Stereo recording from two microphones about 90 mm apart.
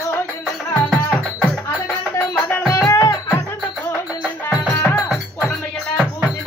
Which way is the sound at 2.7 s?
40° left (ahead or behind).